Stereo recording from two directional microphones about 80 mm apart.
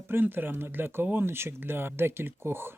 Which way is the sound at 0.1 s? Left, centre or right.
Right.